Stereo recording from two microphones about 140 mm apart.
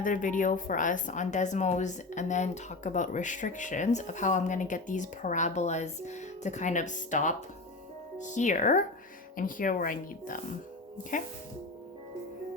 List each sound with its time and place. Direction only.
0.0 s a woman's voice: 70° left (ahead or behind)
9.3 s speech: 80° left